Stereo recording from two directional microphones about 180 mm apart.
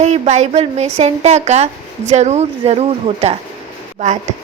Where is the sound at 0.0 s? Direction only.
40° right (ahead or behind).